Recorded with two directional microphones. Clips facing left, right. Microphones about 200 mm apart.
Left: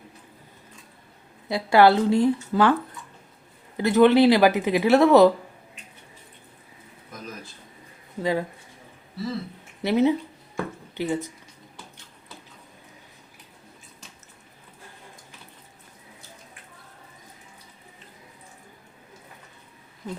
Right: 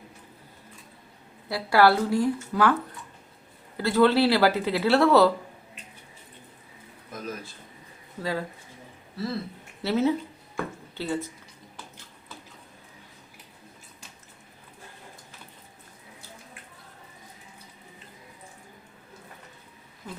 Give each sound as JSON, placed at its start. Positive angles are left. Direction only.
{"t": 1.5, "sound": "speech", "side_deg": 20}
{"t": 3.8, "sound": "speech", "side_deg": 20}
{"t": 8.2, "sound": "speech", "side_deg": 20}
{"t": 9.8, "sound": "speech", "side_deg": 20}